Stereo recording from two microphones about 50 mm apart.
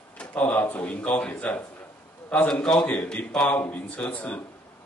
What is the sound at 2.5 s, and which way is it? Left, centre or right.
Speech, centre.